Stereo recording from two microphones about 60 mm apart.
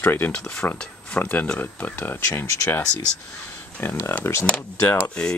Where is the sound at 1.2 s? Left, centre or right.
Left.